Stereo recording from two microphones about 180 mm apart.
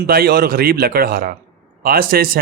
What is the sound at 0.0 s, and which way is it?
A man's voice, 60° right (ahead or behind).